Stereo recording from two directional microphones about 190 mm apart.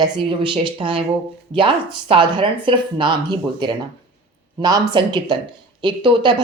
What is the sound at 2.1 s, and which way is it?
Speech, 25° right (ahead or behind).